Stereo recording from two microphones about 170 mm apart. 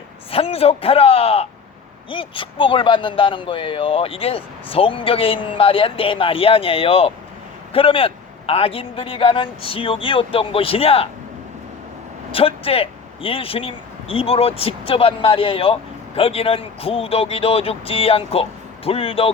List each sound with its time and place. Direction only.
0.3 s a man's voice: 35° left (ahead or behind)
12.3 s a man's voice: 35° left (ahead or behind)